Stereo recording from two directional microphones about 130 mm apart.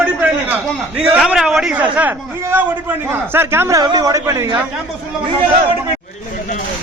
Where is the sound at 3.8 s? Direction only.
30° right (ahead or behind).